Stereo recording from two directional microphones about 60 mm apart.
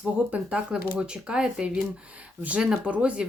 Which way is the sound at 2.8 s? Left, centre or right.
Right.